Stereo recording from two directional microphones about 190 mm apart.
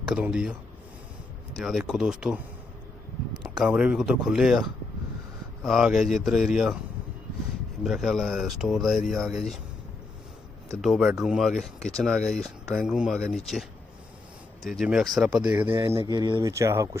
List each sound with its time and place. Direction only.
0.0 s speech: 5° right (ahead or behind)
1.5 s speech: centre (ahead or behind)
3.4 s speech: 5° right (ahead or behind)
7.9 s speech: centre (ahead or behind)
10.8 s speech: centre (ahead or behind)
14.8 s speech: centre (ahead or behind)
15.8 s speech: 25° right (ahead or behind)